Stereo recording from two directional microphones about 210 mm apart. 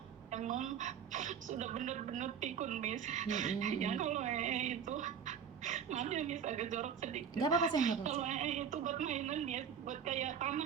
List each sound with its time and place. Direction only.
0.3 s speech: 35° right (ahead or behind)